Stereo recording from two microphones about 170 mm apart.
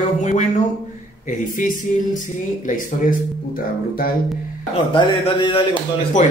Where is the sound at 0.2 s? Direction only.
45° left (ahead or behind).